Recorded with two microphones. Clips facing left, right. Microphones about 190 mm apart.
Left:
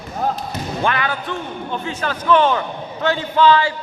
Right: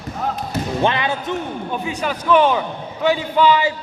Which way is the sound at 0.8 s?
20° right (ahead or behind).